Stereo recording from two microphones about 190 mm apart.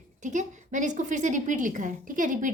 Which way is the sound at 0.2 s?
40° right (ahead or behind).